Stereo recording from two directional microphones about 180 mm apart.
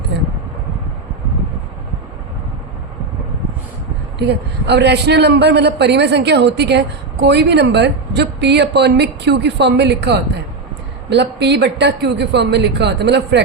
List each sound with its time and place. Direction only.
4.2 s a man's voice: 70° right (ahead or behind)